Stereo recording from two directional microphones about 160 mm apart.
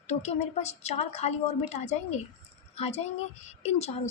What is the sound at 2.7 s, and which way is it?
A woman's voice, 40° left (ahead or behind).